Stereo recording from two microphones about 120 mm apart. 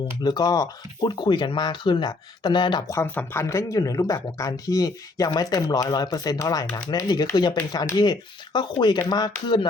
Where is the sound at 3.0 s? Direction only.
15° left (ahead or behind).